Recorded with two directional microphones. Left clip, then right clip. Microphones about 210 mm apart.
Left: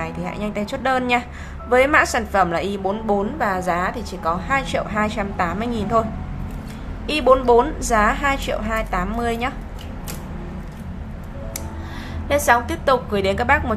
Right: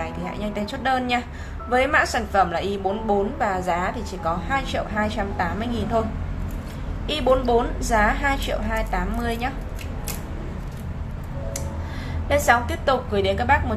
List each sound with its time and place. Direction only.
0.0 s a woman's voice: 15° left (ahead or behind)
7.1 s a woman's voice: 15° left (ahead or behind)
12.3 s a woman's voice: 10° left (ahead or behind)